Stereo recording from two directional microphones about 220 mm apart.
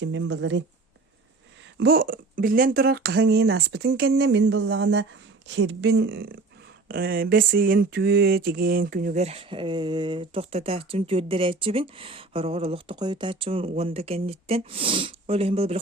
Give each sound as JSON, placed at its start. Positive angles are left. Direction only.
{"t": 0.0, "sound": "speech", "side_deg": -60}
{"t": 1.8, "sound": "speech", "side_deg": -45}
{"t": 6.8, "sound": "a sound", "side_deg": -45}